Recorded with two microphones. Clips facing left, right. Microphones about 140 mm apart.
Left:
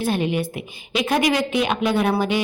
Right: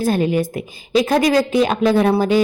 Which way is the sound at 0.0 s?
40° right (ahead or behind).